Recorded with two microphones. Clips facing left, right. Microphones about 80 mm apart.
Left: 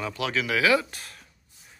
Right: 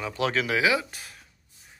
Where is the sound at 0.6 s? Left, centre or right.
Centre.